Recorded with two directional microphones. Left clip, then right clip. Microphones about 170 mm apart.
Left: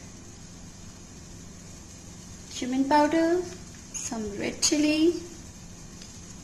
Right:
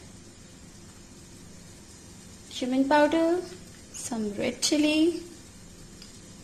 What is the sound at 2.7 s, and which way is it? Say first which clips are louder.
Speech: even; 50° right (ahead or behind).